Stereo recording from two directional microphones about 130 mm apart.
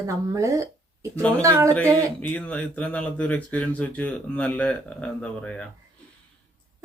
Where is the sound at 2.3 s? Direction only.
10° left (ahead or behind).